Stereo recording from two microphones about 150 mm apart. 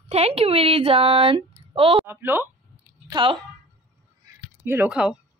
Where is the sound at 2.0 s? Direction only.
15° right (ahead or behind).